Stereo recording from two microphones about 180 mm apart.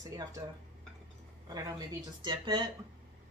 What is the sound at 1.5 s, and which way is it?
Speech, 20° right (ahead or behind).